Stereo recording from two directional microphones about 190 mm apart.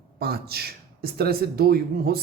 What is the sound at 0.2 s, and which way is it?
Speech, 55° right (ahead or behind).